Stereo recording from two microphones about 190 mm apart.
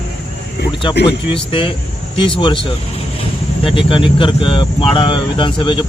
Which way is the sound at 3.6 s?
30° left (ahead or behind).